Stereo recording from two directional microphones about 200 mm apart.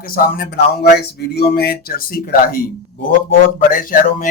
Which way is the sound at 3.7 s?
45° left (ahead or behind).